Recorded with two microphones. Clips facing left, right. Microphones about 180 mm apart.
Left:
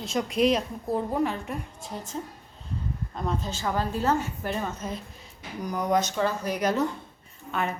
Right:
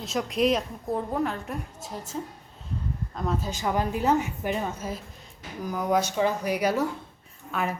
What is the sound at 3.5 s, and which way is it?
A woman's voice, 15° right (ahead or behind).